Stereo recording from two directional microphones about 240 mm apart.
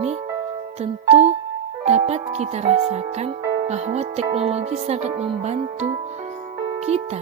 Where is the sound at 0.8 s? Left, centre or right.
Right.